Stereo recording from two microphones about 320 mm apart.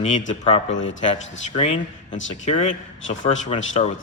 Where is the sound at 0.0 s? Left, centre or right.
Centre.